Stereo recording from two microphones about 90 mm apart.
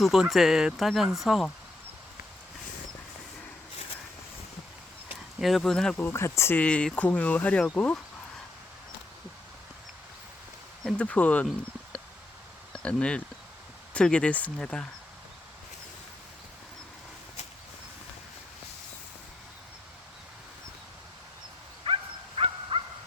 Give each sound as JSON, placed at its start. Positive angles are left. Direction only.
{"t": 0.0, "sound": "speech", "side_deg": -5}
{"t": 5.4, "sound": "speech", "side_deg": 0}
{"t": 6.0, "sound": "speech", "side_deg": 25}
{"t": 6.6, "sound": "speech", "side_deg": 10}
{"t": 10.9, "sound": "speech", "side_deg": 15}
{"t": 12.7, "sound": "speech", "side_deg": 10}
{"t": 21.9, "sound": "dog", "side_deg": -75}
{"t": 22.4, "sound": "a sound", "side_deg": -90}